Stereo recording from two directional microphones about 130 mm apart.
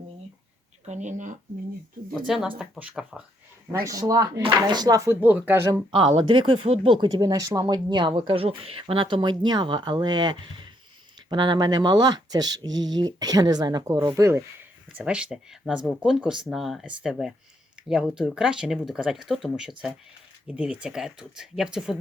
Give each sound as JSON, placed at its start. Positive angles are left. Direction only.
{"t": 0.9, "sound": "speech", "side_deg": -70}
{"t": 2.0, "sound": "speech", "side_deg": 0}
{"t": 3.7, "sound": "speech", "side_deg": -25}
{"t": 5.2, "sound": "speech", "side_deg": -15}
{"t": 5.9, "sound": "speech", "side_deg": -40}
{"t": 14.2, "sound": "speech", "side_deg": -20}
{"t": 14.9, "sound": "speech", "side_deg": -10}